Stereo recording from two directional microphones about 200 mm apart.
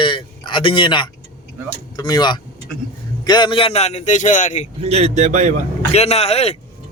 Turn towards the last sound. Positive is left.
turn(degrees=30)  # may be behind; listen again after turning